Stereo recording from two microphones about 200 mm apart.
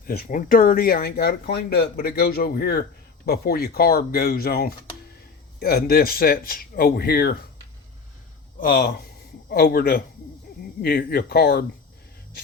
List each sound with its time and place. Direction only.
0.0 s speech: 50° left (ahead or behind)
8.6 s speech: 50° left (ahead or behind)